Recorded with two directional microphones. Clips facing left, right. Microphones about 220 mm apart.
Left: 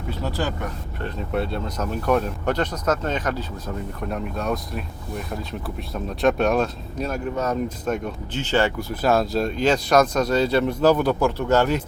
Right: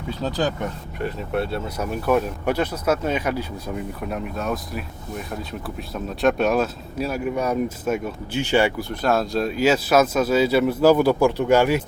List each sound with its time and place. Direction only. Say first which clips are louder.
0.1 s speech: right 3 dB; 15° right (ahead or behind)
1.3 s speech: left 1 dB; 5° right (ahead or behind)
8.8 s speech: left 1 dB; 5° left (ahead or behind)